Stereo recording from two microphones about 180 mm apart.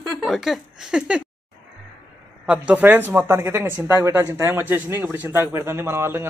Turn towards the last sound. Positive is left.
turn(degrees=-15)  # may be behind; listen again after turning